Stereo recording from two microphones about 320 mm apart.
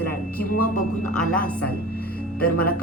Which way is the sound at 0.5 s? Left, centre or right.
Left.